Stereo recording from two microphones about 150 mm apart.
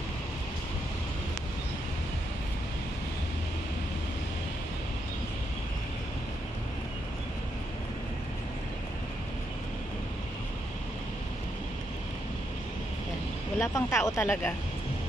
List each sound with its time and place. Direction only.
13.6 s speech: 20° left (ahead or behind)